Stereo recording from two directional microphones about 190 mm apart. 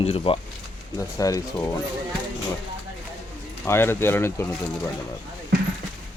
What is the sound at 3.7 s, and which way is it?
Speech, 10° left (ahead or behind).